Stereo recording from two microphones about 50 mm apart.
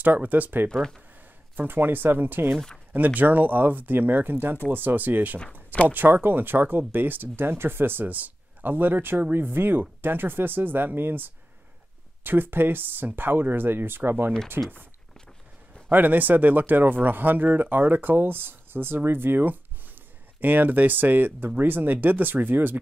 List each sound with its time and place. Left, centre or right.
0.0 s speech: right
5.5 s a sound: left
5.9 s speech: right
15.9 s speech: right